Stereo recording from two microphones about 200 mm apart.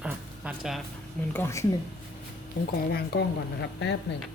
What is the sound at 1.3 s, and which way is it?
Speech, 15° left (ahead or behind).